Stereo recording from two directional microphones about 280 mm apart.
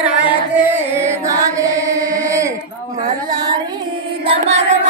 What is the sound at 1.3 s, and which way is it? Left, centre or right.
Music, centre.